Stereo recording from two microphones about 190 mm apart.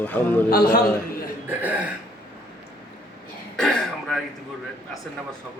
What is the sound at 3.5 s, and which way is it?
Throat clearing, 5° left (ahead or behind).